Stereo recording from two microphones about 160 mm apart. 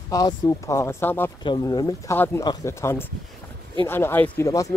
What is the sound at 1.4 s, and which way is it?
Speech, 25° left (ahead or behind).